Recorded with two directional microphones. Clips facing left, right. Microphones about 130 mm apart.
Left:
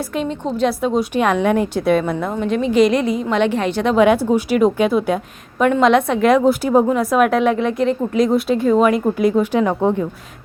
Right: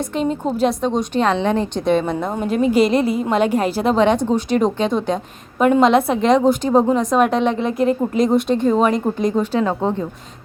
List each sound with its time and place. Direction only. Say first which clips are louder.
0.8 s speech: left 1 dB; 5° left (ahead or behind)
2.6 s a woman's voice: even; 45° right (ahead or behind)
3.9 s speech: left 4 dB; 10° left (ahead or behind)
5.6 s speech: even; 5° right (ahead or behind)